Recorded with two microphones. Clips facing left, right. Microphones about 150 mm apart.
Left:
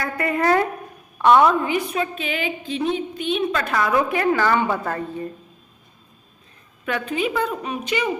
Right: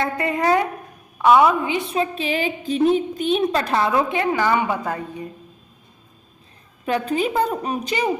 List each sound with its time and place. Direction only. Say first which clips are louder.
0.0 s a woman's voice: right 1 dB; 20° right (ahead or behind)
1.2 s a woman's voice: even; 5° right (ahead or behind)
1.6 s a woman's voice: right 1 dB; 20° right (ahead or behind)
6.8 s a woman's voice: right 3 dB; 35° right (ahead or behind)